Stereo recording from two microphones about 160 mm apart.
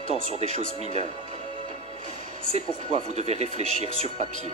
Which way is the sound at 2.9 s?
40° right (ahead or behind).